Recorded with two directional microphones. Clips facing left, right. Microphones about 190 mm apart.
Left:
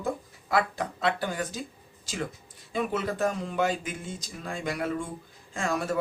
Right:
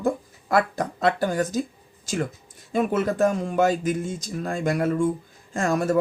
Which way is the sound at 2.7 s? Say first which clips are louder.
Right 6 dB; 50° right (ahead or behind).